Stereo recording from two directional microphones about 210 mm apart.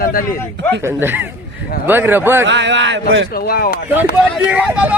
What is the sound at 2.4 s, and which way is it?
Speech, 60° right (ahead or behind).